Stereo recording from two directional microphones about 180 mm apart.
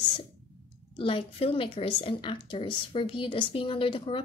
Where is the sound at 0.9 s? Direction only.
30° left (ahead or behind).